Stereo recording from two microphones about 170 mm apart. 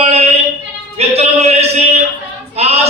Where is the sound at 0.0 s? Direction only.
40° right (ahead or behind).